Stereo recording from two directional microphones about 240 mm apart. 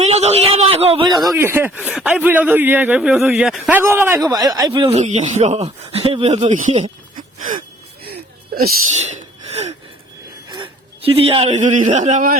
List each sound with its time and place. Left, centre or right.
0.0 s speech: right
9.5 s gasp: right
10.5 s a man's voice: right